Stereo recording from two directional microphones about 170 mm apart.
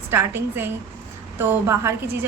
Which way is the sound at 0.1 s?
15° right (ahead or behind).